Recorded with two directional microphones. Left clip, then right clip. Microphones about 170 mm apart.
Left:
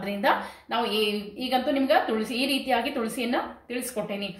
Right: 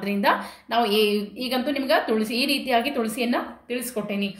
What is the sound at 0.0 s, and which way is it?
A woman's voice, 40° right (ahead or behind).